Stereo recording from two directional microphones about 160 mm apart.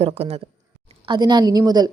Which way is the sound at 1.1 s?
25° right (ahead or behind).